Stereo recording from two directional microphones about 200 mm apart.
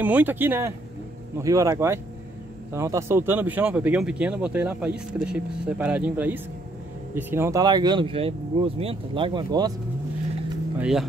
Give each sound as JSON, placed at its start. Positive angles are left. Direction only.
{"t": 0.0, "sound": "speech", "side_deg": -10}
{"t": 10.8, "sound": "speech", "side_deg": 0}